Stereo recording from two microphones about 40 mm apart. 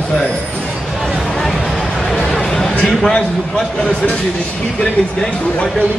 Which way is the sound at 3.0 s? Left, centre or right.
Centre.